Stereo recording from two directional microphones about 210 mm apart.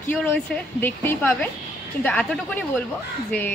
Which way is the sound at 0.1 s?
10° left (ahead or behind).